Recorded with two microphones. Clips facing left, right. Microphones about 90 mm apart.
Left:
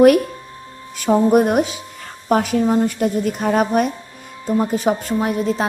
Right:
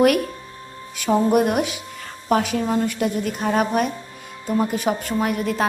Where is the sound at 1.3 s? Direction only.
45° left (ahead or behind).